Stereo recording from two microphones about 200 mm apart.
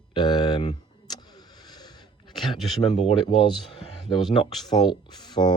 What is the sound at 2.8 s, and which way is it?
Speech, 25° left (ahead or behind).